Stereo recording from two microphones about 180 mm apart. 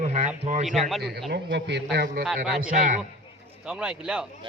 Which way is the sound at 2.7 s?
45° right (ahead or behind).